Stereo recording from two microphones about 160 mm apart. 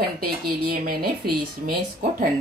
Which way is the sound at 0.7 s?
70° right (ahead or behind).